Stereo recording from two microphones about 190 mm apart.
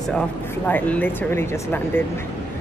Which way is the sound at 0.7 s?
10° left (ahead or behind).